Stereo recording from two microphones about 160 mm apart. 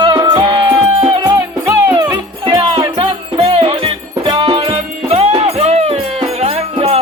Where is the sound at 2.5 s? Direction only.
30° right (ahead or behind).